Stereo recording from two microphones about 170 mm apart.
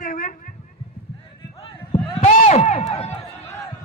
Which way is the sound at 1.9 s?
40° left (ahead or behind).